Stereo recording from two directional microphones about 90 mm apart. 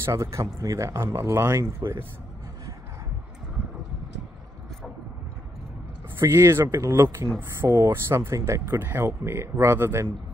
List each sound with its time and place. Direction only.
0.0 s speech: 35° right (ahead or behind)
6.1 s speech: 30° right (ahead or behind)